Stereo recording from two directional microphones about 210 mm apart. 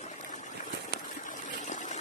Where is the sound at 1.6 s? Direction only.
35° left (ahead or behind).